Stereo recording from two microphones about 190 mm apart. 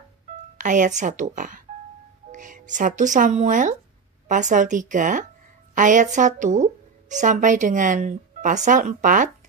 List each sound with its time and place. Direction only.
0.6 s a woman's voice: 40° right (ahead or behind)